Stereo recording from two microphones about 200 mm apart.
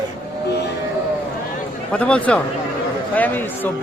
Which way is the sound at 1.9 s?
5° left (ahead or behind).